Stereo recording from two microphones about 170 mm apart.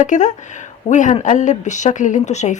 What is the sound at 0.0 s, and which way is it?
A woman's voice, 45° left (ahead or behind).